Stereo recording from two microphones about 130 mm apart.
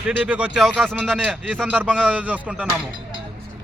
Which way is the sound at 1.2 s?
10° right (ahead or behind).